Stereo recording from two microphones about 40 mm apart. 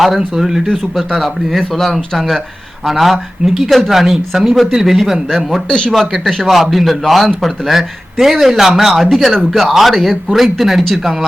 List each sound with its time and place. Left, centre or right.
0.2 s speech: centre
0.7 s speech: centre
5.6 s speech: centre
5.9 s speech: centre